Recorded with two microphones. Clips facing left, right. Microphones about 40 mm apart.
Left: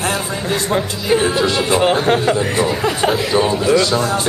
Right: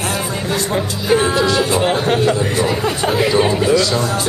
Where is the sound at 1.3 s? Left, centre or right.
Left.